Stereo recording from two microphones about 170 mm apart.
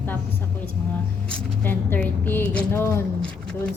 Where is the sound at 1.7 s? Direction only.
10° left (ahead or behind).